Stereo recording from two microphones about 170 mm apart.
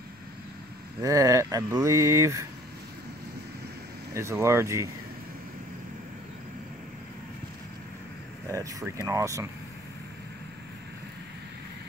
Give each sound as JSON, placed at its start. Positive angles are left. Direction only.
{"t": 1.0, "sound": "speech", "side_deg": -20}
{"t": 4.1, "sound": "speech", "side_deg": -15}
{"t": 8.5, "sound": "speech", "side_deg": -20}